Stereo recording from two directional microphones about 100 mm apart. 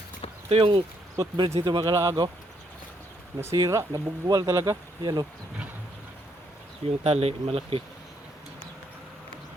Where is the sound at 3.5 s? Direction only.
40° right (ahead or behind).